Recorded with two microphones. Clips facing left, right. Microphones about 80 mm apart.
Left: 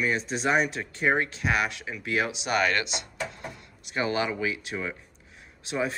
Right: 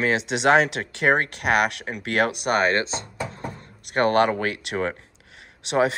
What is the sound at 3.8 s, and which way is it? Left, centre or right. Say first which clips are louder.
Speech: right 8 dB; right.